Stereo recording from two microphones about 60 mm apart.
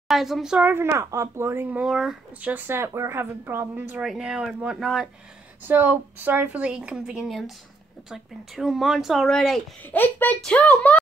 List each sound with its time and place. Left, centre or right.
0.1 s speech: centre
0.6 s speech: right
1.9 s speech: centre
2.4 s a woman's voice: right
4.0 s speech: centre
5.6 s a woman's voice: right; by 7.2 s centre
7.2 s speech: centre
9.8 s speech: left